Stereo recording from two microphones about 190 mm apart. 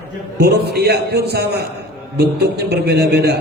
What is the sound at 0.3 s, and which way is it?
A man's voice, 60° right (ahead or behind).